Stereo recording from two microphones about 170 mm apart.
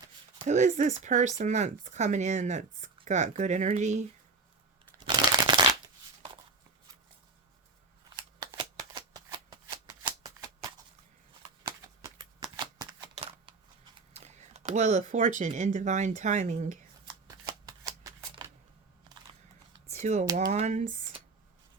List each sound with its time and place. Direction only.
0.4 s speech: 45° right (ahead or behind)
4.9 s shuffling cards: 25° right (ahead or behind)
8.5 s shuffling cards: 25° right (ahead or behind)
12.1 s shuffling cards: 25° right (ahead or behind)
14.1 s speech: 40° right (ahead or behind)
17.2 s shuffling cards: 25° right (ahead or behind)
20.0 s speech: 40° right (ahead or behind)